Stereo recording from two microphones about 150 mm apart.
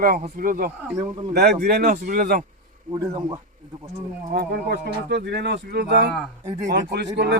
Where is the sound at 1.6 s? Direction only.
75° right (ahead or behind).